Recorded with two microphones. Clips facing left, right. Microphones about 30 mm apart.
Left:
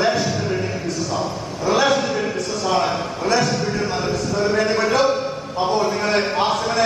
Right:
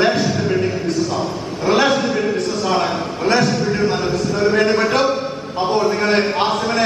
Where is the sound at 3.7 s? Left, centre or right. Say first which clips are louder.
Right 4 dB; centre.